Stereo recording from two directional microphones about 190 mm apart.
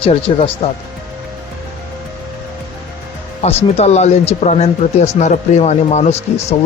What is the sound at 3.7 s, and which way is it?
Speech, 35° left (ahead or behind).